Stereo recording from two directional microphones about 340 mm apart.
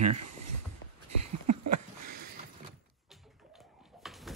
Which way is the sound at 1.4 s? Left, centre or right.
Right.